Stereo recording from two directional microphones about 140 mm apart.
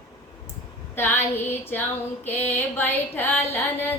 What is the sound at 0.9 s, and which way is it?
Female singing, 15° left (ahead or behind).